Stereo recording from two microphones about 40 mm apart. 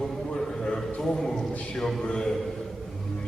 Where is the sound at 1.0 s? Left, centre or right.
Centre.